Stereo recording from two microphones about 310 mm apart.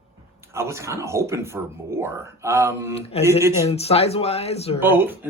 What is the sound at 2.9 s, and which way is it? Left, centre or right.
Speech, centre.